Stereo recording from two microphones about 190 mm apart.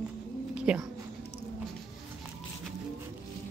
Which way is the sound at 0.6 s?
5° right (ahead or behind).